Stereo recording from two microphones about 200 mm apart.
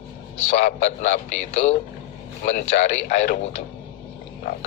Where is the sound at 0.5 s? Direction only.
40° left (ahead or behind).